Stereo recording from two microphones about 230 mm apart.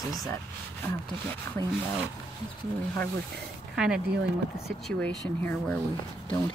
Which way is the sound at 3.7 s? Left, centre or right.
Centre.